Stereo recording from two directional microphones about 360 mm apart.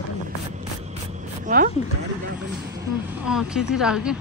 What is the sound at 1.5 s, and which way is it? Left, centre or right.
Speech, right.